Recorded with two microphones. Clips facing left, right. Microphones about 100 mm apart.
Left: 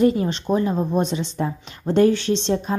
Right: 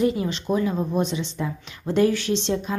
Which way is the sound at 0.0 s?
45° left (ahead or behind).